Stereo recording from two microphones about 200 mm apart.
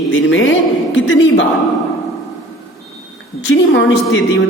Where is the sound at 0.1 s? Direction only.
75° left (ahead or behind).